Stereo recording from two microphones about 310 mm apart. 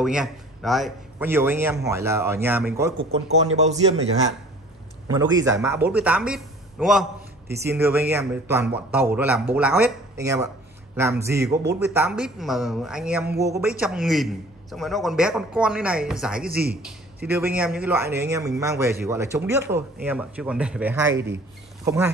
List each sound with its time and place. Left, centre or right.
0.0 s a man's voice: centre
3.1 s a man's voice: right
5.0 s a man's voice: centre
16.4 s a man's voice: right
17.2 s a man's voice: centre